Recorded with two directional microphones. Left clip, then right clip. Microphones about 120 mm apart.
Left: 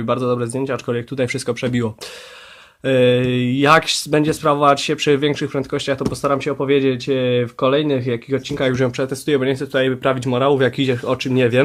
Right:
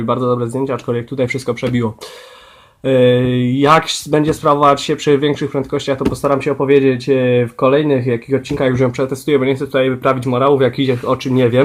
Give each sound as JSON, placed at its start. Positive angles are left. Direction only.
{"t": 0.0, "sound": "speech", "side_deg": 20}